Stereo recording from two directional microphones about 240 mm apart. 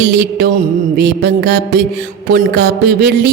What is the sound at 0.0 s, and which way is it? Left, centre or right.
A man's voice, right.